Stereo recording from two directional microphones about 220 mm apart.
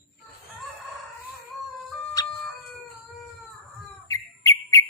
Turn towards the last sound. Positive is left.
turn(degrees=15)  # may be behind; listen again after turning